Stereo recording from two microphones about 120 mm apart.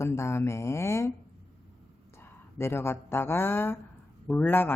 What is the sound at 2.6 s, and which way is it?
A man's voice, 20° left (ahead or behind).